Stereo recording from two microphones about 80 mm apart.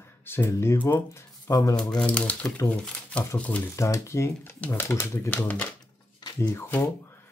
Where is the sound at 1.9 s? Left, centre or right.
Centre.